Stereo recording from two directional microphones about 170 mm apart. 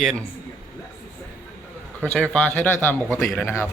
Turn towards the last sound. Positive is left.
turn(degrees=15)  # may be behind; listen again after turning